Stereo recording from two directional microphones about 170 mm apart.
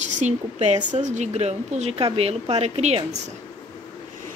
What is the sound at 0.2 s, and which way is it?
A woman's voice, 40° right (ahead or behind).